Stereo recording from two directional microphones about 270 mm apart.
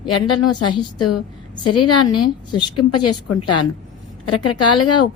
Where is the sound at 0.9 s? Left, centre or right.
Left.